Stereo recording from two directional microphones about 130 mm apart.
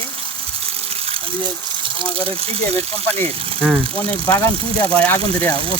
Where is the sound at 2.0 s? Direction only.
45° right (ahead or behind).